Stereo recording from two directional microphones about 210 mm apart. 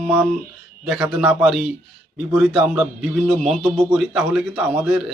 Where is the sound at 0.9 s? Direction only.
Centre (ahead or behind).